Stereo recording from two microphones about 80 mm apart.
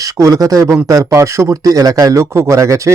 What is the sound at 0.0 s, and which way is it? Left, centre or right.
A man's voice, right.